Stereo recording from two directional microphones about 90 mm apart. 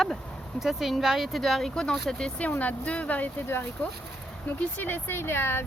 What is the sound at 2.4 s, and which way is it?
Speech, 15° left (ahead or behind).